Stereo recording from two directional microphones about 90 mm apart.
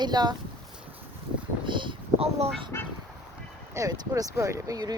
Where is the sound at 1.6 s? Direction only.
65° right (ahead or behind).